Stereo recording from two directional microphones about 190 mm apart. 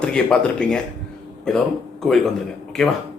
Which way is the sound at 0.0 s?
5° left (ahead or behind).